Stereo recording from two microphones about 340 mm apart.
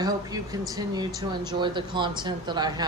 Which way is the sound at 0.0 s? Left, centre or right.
Centre.